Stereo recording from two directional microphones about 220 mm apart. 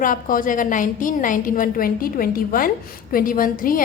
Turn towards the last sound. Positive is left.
turn(degrees=40)  # may be behind; listen again after turning